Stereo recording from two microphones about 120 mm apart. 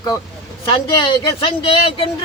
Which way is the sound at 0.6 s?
40° left (ahead or behind).